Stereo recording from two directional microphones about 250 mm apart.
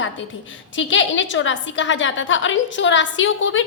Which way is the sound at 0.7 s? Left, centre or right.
Left.